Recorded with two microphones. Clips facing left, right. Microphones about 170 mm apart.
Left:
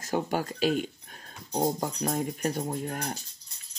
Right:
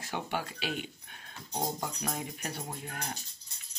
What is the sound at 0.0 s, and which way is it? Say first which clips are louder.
Speech: left 7 dB; 40° left (ahead or behind).